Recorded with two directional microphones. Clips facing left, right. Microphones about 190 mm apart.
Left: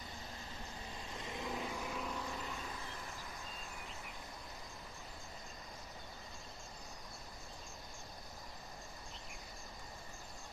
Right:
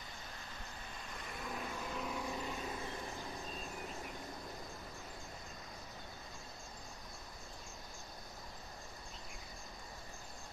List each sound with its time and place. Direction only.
1.1 s vehicle: 20° left (ahead or behind)
1.9 s vehicle: centre (ahead or behind)
2.2 s vehicle: 20° right (ahead or behind)